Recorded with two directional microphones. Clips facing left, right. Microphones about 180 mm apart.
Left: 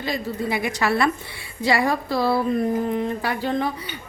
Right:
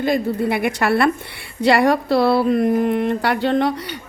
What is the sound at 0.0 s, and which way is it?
Speech, 55° right (ahead or behind).